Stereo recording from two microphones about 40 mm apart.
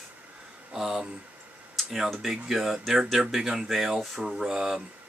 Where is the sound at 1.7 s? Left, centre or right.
Centre.